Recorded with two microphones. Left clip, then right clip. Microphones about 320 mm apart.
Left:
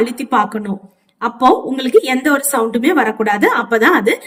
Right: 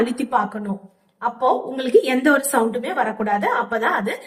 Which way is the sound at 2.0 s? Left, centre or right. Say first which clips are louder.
Left 2 dB; left.